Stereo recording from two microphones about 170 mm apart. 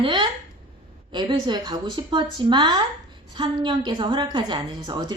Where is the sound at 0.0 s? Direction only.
30° right (ahead or behind).